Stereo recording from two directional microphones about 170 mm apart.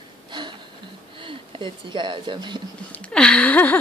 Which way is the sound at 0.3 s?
25° right (ahead or behind).